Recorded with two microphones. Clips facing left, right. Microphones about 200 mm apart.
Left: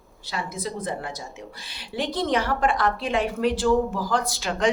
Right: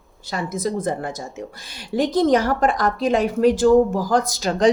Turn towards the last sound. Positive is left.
turn(degrees=-35)  # may be behind; listen again after turning